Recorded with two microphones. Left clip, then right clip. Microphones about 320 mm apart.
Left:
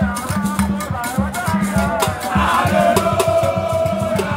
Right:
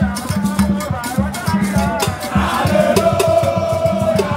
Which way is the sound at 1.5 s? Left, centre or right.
Centre.